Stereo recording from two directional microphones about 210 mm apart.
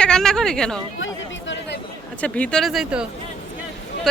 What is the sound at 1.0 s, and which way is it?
Chatter, 60° left (ahead or behind).